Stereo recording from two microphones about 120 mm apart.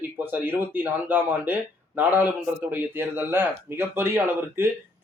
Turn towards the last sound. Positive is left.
turn(degrees=-20)  # may be behind; listen again after turning